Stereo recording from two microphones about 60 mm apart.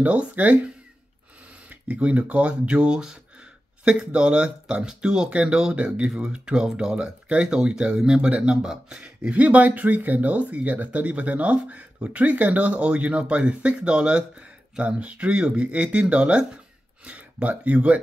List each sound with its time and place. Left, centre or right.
0.0 s speech: right
1.7 s speech: right
9.3 s speech: right